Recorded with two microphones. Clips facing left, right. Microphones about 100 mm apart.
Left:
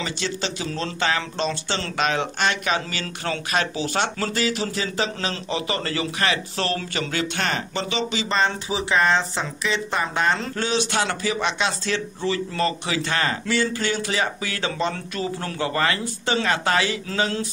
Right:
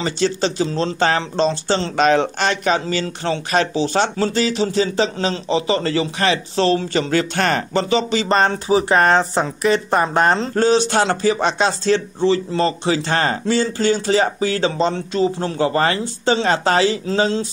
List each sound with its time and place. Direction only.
0.0 s speech: 35° right (ahead or behind)